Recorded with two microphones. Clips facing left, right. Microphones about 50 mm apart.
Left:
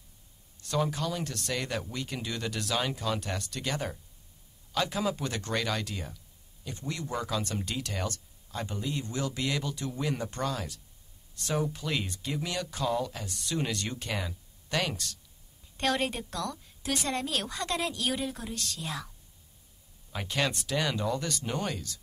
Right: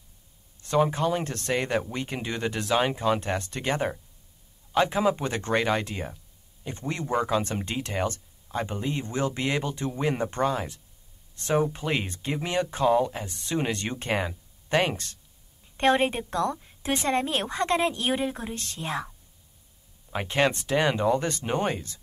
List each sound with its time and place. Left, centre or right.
0.6 s speech: right